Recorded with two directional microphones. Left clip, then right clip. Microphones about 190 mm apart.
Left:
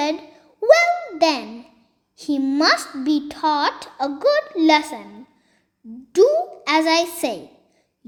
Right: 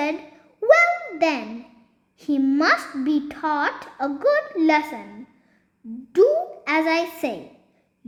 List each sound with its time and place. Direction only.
0.0 s babbling: 20° left (ahead or behind)
2.1 s a child's voice: 20° left (ahead or behind)
6.1 s a child's voice: 20° left (ahead or behind)